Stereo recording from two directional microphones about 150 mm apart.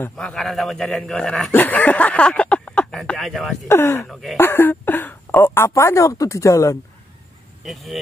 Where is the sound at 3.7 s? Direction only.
15° left (ahead or behind).